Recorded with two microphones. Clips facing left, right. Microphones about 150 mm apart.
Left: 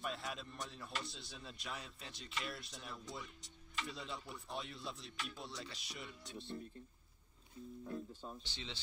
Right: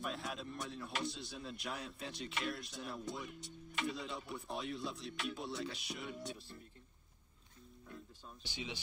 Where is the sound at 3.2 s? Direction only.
65° right (ahead or behind).